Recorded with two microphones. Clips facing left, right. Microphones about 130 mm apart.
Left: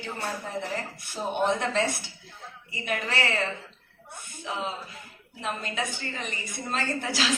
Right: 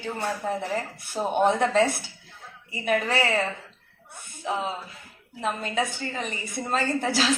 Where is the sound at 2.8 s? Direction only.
40° right (ahead or behind).